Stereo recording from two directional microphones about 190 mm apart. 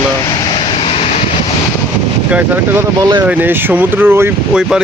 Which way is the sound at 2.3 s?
10° right (ahead or behind).